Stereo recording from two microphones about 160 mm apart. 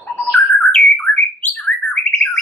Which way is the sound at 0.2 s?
10° left (ahead or behind).